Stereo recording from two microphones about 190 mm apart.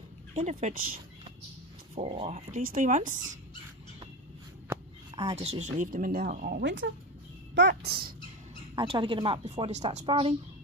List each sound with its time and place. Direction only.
0.3 s speech: 35° right (ahead or behind)
5.1 s speech: 35° right (ahead or behind); by 6.6 s 50° right (ahead or behind)
6.6 s speech: 75° right (ahead or behind)
7.5 s speech: 60° right (ahead or behind)
8.7 s a woman's voice: 25° right (ahead or behind)